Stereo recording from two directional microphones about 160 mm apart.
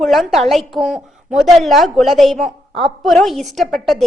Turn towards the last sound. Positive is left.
turn(degrees=0)  # may be behind; listen again after turning